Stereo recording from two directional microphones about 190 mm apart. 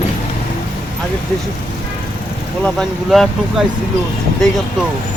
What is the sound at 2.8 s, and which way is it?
Speech, centre (ahead or behind).